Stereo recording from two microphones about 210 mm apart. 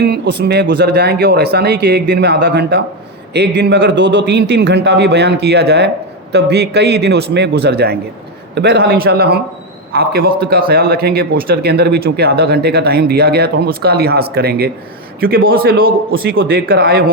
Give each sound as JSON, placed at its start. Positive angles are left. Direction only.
{"t": 0.0, "sound": "a man's voice", "side_deg": -50}